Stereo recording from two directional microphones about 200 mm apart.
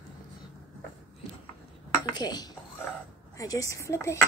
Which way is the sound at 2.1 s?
20° left (ahead or behind).